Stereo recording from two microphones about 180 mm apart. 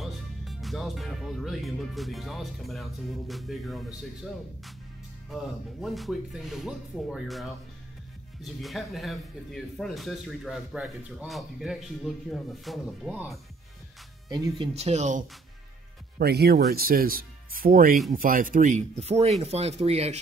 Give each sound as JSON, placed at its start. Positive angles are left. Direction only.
{"t": 0.0, "sound": "speech", "side_deg": 0}
{"t": 14.3, "sound": "speech", "side_deg": -20}
{"t": 14.7, "sound": "speech", "side_deg": -35}
{"t": 16.2, "sound": "speech", "side_deg": -60}